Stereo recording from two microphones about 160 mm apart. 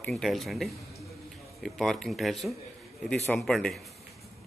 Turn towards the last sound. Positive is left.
turn(degrees=0)  # may be behind; listen again after turning